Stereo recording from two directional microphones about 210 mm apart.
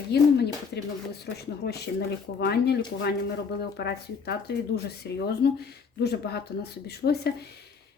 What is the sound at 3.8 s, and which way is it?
A woman's voice, 50° left (ahead or behind).